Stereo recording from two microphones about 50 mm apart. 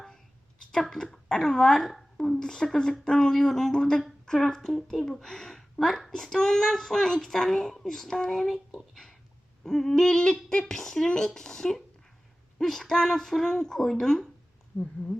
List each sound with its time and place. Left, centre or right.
0.7 s a woman's voice: centre
14.7 s speech: left